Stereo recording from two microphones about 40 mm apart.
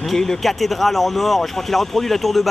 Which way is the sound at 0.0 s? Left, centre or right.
Centre.